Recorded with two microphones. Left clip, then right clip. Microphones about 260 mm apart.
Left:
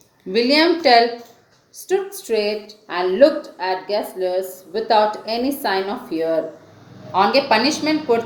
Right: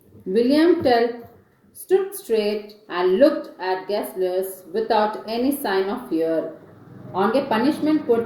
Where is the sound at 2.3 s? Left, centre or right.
Centre.